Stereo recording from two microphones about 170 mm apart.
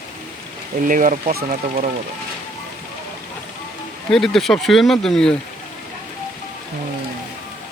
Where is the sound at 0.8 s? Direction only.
50° right (ahead or behind).